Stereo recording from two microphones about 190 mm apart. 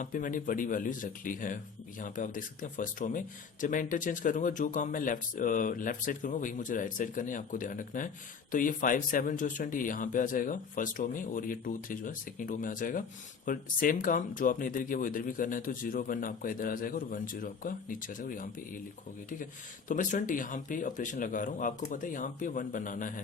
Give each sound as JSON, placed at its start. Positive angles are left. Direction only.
{"t": 0.0, "sound": "speech", "side_deg": 45}
{"t": 19.9, "sound": "speech", "side_deg": 45}